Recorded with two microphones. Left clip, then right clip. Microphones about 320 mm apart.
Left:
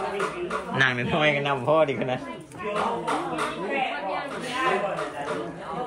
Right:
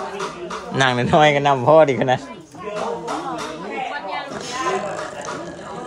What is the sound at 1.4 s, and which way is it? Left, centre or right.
Speech, right.